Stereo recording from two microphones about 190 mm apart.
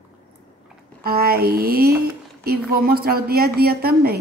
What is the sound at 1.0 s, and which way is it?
Speech, 55° right (ahead or behind).